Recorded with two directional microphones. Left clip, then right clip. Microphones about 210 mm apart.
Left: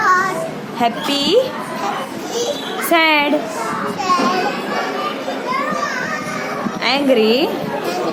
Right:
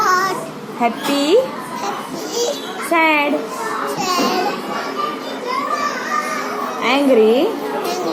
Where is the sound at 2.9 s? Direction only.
25° left (ahead or behind).